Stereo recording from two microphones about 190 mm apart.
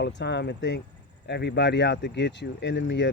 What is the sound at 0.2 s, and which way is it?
Speech, 65° left (ahead or behind).